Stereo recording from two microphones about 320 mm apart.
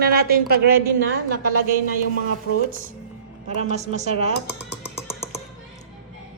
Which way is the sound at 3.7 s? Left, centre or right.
Right.